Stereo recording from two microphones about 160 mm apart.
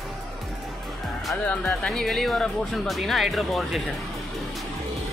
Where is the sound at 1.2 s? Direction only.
5° left (ahead or behind).